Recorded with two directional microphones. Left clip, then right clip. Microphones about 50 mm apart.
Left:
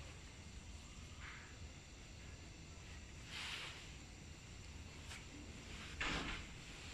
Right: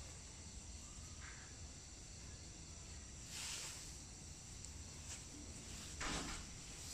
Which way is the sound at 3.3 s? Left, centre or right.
Centre.